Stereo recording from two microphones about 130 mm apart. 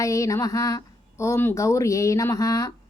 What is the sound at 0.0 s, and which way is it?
Speech, 25° left (ahead or behind).